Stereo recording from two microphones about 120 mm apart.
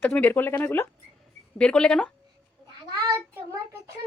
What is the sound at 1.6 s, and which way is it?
Speech, 5° left (ahead or behind).